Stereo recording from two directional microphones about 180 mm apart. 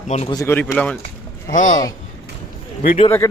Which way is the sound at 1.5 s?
45° left (ahead or behind).